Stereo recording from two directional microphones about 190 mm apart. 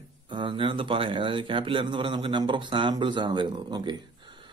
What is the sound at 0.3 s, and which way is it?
Speech, 25° right (ahead or behind).